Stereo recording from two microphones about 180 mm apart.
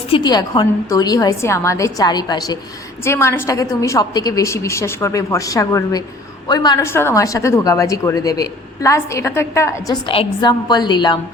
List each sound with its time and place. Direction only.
0.1 s a woman's voice: 25° left (ahead or behind)